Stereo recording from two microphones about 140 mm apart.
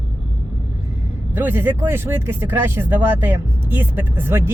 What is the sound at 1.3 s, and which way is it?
Speech, 15° right (ahead or behind).